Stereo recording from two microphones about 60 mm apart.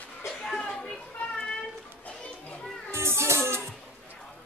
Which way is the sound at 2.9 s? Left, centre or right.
Right.